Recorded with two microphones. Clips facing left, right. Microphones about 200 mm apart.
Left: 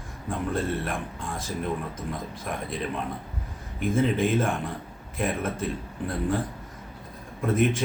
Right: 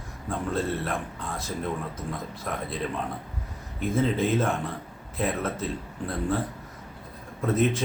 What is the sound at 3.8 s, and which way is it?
Speech, 15° left (ahead or behind).